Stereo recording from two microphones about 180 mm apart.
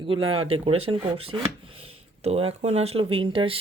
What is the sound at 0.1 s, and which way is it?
Speech, 30° right (ahead or behind).